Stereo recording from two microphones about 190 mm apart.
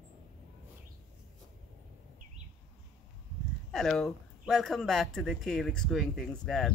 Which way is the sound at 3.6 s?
Centre (ahead or behind).